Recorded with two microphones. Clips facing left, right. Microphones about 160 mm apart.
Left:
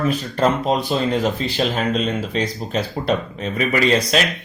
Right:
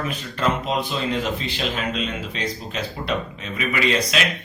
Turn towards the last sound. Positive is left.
turn(degrees=40)  # may be behind; listen again after turning